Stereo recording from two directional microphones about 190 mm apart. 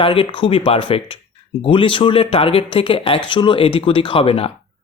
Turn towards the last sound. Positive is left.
turn(degrees=30)  # may be behind; listen again after turning